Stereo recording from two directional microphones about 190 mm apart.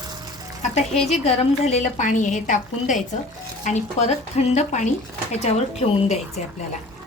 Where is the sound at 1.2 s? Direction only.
35° left (ahead or behind).